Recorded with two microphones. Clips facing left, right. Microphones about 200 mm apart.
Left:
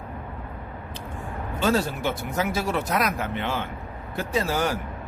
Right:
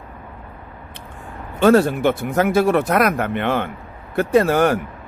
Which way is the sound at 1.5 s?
60° right (ahead or behind).